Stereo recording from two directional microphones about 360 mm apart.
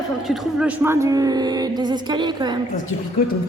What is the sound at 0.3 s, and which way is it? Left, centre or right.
A woman's voice, centre.